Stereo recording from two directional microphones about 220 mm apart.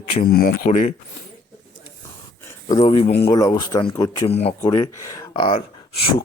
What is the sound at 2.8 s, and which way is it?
A man's voice, 25° left (ahead or behind).